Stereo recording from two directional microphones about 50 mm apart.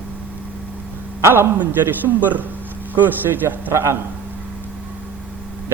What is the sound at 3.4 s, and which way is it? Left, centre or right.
Speech, right.